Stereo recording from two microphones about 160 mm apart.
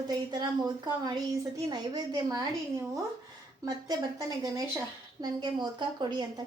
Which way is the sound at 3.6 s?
25° right (ahead or behind).